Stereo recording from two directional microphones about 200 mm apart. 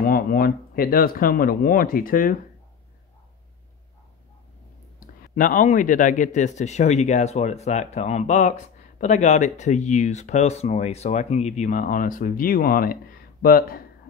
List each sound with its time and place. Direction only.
0.0 s speech: 45° left (ahead or behind)
5.3 s speech: 40° left (ahead or behind)